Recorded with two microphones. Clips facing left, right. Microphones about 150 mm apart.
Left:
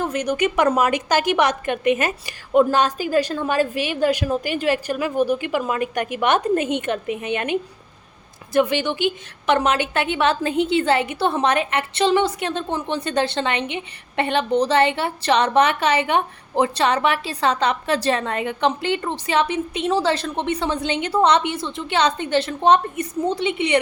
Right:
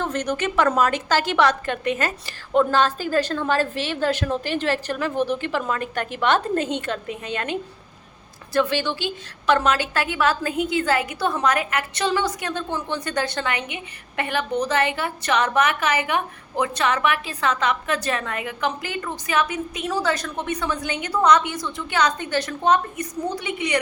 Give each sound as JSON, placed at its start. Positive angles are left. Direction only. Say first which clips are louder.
{"t": 0.0, "sound": "a woman's voice", "louder": "left 3 dB", "side_deg": 10}